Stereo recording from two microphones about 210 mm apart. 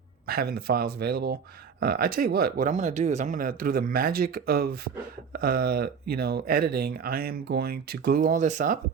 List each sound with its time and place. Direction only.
0.3 s speech: 45° right (ahead or behind)